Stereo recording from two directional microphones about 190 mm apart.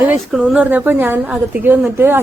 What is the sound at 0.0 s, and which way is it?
A woman's voice, 10° right (ahead or behind).